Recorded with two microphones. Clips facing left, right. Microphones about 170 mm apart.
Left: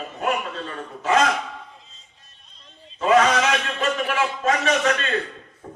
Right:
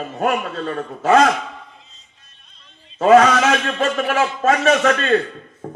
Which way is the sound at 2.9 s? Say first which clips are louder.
Right 6 dB; 40° right (ahead or behind).